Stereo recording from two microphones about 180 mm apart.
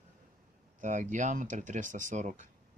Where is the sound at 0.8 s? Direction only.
45° right (ahead or behind).